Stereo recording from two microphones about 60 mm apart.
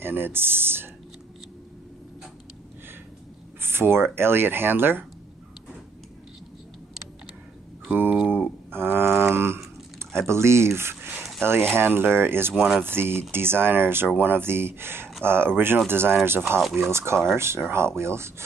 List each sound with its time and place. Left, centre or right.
0.0 s speech: right
3.6 s speech: right
7.9 s speech: right
8.7 s a sound: right
10.2 s speech: right